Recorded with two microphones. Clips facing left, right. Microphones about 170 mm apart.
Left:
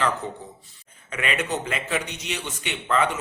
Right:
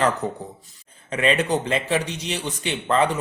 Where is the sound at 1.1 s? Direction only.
30° right (ahead or behind).